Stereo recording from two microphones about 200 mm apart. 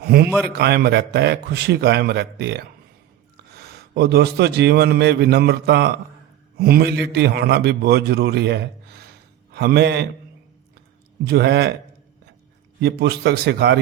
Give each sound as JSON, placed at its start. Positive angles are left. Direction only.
{"t": 0.0, "sound": "a man's voice", "side_deg": -50}
{"t": 11.3, "sound": "a man's voice", "side_deg": -55}
{"t": 12.8, "sound": "a man's voice", "side_deg": -55}